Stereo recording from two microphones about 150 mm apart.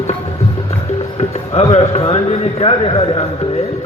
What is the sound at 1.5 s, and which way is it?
A man's voice, 45° left (ahead or behind).